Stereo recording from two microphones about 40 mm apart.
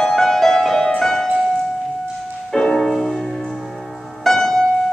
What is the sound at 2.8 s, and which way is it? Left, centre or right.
Music, centre.